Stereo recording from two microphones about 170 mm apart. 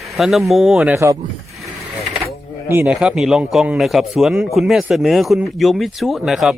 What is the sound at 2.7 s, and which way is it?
A man's voice, 10° right (ahead or behind).